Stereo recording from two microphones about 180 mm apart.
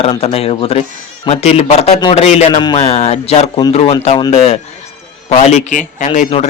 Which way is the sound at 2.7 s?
40° left (ahead or behind).